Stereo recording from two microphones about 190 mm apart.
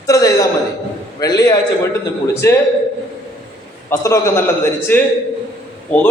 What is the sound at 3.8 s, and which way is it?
A man's voice, 15° left (ahead or behind).